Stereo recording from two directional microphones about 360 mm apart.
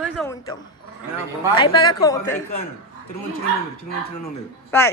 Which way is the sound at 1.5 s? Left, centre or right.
Centre.